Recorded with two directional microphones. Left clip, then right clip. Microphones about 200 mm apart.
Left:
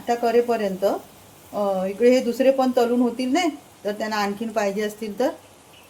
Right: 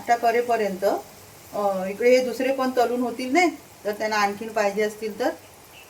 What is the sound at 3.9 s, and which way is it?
Speech, 40° left (ahead or behind).